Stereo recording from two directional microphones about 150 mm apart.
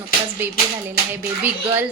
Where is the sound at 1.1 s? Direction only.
15° right (ahead or behind).